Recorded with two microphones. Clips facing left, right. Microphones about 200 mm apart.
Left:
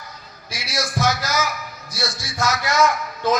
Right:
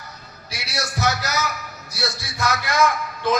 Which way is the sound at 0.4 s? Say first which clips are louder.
Left 3 dB; 65° right (ahead or behind).